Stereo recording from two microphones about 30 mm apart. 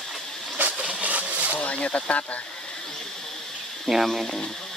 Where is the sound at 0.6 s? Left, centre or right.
Right.